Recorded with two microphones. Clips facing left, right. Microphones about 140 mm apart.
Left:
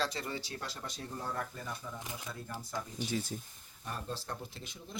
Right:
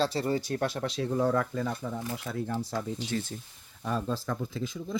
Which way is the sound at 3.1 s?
10° left (ahead or behind).